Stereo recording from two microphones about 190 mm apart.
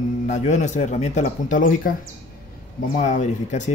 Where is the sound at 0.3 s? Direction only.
40° left (ahead or behind).